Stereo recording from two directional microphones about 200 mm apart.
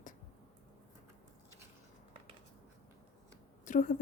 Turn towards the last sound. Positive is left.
turn(degrees=40)  # may be behind; listen again after turning